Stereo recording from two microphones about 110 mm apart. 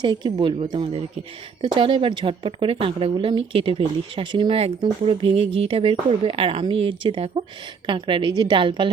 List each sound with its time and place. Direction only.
0.0 s a woman's voice: 45° right (ahead or behind)